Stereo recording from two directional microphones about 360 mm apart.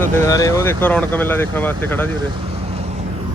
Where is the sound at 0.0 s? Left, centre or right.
Centre.